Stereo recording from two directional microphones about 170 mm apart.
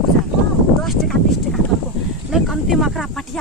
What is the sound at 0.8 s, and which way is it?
Speech, 5° left (ahead or behind).